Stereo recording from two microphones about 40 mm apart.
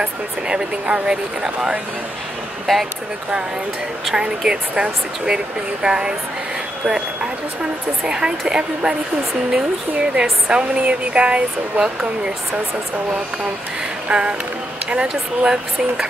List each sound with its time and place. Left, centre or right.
0.0 s speech: right
2.7 s speech: centre
4.1 s speech: centre
8.0 s speech: right
14.0 s music: right
14.9 s speech: right